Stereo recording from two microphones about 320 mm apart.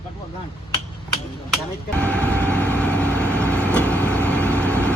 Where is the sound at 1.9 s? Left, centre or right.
Centre.